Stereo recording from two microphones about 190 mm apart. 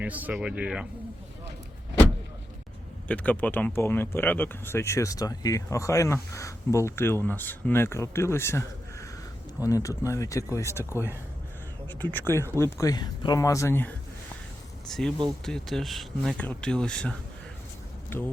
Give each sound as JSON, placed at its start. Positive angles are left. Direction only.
{"t": 0.0, "sound": "speech", "side_deg": -10}
{"t": 3.1, "sound": "speech", "side_deg": 10}
{"t": 14.8, "sound": "speech", "side_deg": 0}